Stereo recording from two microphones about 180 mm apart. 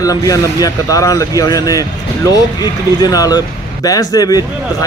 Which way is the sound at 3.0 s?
20° left (ahead or behind).